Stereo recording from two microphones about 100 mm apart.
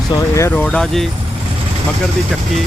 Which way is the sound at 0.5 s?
10° left (ahead or behind).